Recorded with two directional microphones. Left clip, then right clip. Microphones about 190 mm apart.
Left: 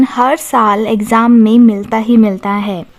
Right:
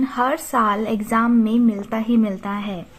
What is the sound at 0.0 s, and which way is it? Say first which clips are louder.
A woman's voice: left 9 dB; 40° left (ahead or behind).